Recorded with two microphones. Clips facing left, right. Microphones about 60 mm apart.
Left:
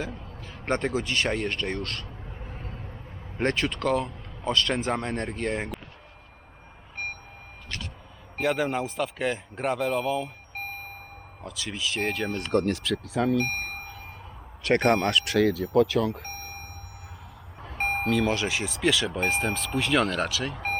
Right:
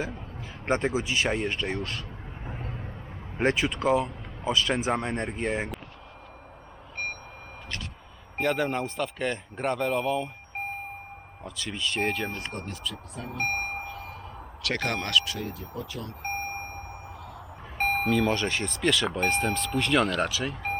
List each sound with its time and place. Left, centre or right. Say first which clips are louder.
0.0 s speech: right 1 dB; right
3.3 s speech: right 1 dB; centre
8.4 s speech: left 1 dB; centre
11.4 s speech: even; centre
12.5 s speech: left 11 dB; left
13.4 s a sound: right 1 dB; right
14.8 s speech: left 3 dB; centre
15.2 s speech: left 12 dB; left
16.2 s a sound: right 7 dB; right
17.6 s speech: right 1 dB; centre